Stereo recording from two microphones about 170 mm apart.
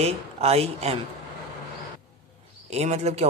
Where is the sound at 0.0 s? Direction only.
40° right (ahead or behind).